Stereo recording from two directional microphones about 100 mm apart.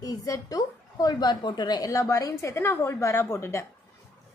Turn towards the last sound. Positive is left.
turn(degrees=30)  # may be behind; listen again after turning